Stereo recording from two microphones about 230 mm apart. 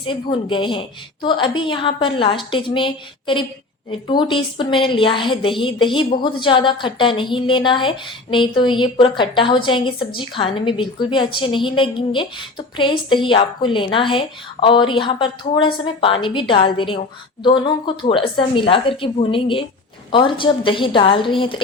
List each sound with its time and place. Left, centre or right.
0.0 s a woman's voice: left